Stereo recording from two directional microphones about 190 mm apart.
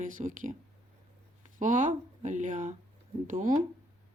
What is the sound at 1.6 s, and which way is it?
Speech, 40° right (ahead or behind).